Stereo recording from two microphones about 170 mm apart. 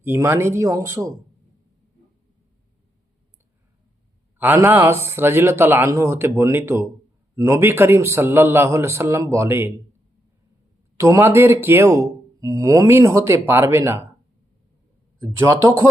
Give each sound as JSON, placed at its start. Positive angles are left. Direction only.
{"t": 0.0, "sound": "speech", "side_deg": -15}
{"t": 4.4, "sound": "speech", "side_deg": -10}
{"t": 10.9, "sound": "speech", "side_deg": -15}
{"t": 15.2, "sound": "speech", "side_deg": -15}